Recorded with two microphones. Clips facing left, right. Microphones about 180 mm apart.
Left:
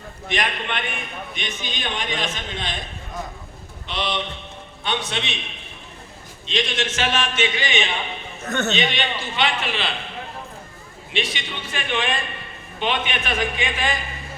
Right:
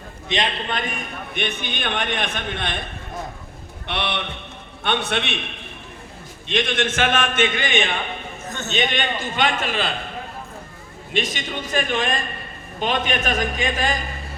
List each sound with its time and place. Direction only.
0.3 s a man's voice: 25° right (ahead or behind); by 8.3 s 50° right (ahead or behind)
8.4 s a man's voice: 65° left (ahead or behind)
8.7 s a man's voice: 50° right (ahead or behind)